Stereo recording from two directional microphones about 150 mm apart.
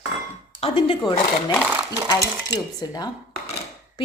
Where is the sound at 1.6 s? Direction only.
10° right (ahead or behind).